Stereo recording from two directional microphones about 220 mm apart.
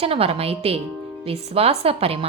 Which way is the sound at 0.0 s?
25° right (ahead or behind).